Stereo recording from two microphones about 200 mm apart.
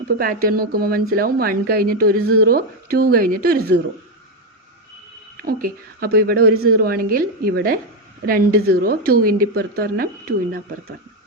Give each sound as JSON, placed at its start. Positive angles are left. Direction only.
{"t": 0.2, "sound": "speech", "side_deg": -45}
{"t": 5.4, "sound": "speech", "side_deg": -45}